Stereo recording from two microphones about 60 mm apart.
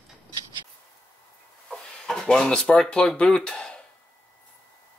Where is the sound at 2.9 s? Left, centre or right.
Centre.